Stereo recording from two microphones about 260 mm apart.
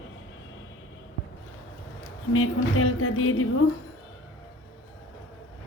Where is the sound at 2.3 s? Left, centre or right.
Left.